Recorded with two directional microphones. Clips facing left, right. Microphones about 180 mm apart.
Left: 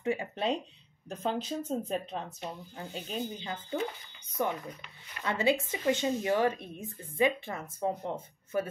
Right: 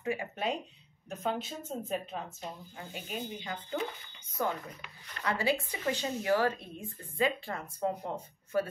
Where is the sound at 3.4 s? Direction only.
25° left (ahead or behind).